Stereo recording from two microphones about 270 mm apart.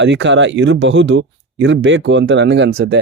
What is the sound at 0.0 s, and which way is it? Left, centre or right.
Speech, right.